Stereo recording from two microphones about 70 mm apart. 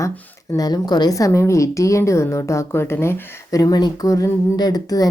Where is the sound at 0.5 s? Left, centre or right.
Left.